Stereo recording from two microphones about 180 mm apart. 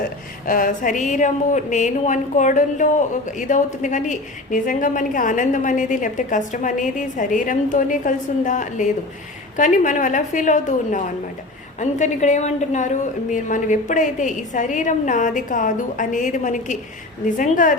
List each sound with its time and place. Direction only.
0.4 s speech: 50° left (ahead or behind)